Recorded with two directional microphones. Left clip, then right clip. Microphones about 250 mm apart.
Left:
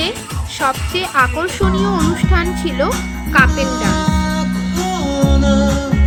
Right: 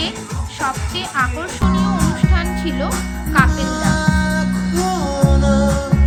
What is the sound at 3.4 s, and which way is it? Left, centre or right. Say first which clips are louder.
Music: left 3 dB; centre.